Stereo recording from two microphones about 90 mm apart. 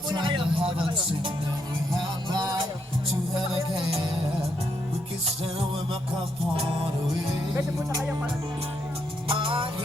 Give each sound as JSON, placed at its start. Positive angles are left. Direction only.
{"t": 0.1, "sound": "music", "side_deg": -60}
{"t": 2.0, "sound": "music", "side_deg": -45}
{"t": 9.3, "sound": "music", "side_deg": -80}